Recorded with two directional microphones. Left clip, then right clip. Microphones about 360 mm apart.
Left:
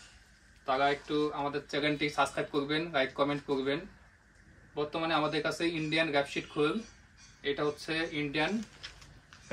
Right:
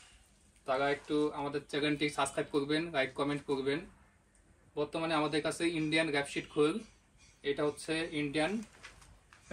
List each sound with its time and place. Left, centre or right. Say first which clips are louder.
0.7 s speech: left 3 dB; centre